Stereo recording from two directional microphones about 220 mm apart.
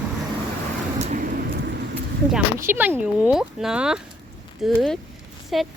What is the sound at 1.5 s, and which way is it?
Vehicle, 45° right (ahead or behind).